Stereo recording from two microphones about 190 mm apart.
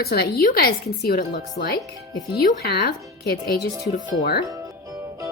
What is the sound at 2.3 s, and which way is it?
A woman's voice, 55° left (ahead or behind).